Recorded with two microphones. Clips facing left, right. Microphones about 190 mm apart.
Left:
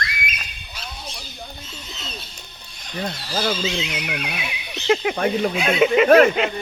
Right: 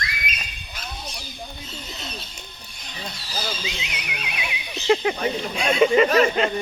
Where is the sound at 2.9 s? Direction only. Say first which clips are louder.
Left 8 dB; 55° left (ahead or behind).